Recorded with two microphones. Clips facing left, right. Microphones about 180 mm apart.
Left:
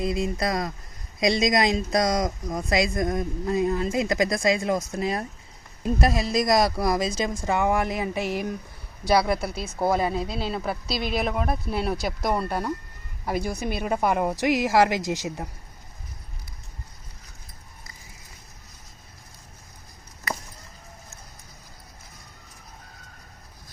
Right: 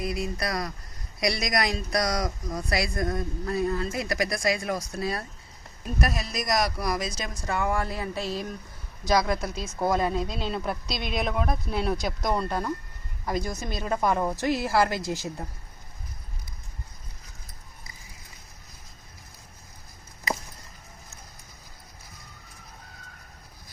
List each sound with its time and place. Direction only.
0.0 s speech: 25° left (ahead or behind)